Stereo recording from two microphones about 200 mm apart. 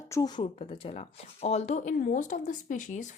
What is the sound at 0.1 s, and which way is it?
Speech, 20° left (ahead or behind).